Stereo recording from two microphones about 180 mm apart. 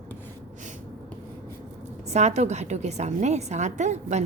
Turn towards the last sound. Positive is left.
turn(degrees=-40)  # may be behind; listen again after turning